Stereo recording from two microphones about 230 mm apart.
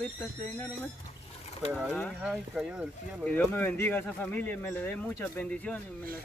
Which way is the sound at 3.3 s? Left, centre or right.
Centre.